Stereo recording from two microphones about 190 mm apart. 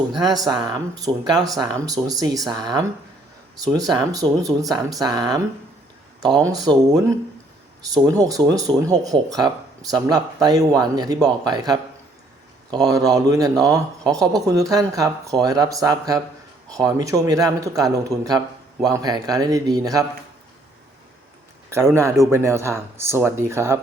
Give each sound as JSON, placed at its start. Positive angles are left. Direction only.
{"t": 0.2, "sound": "speech", "side_deg": -20}
{"t": 21.7, "sound": "speech", "side_deg": -15}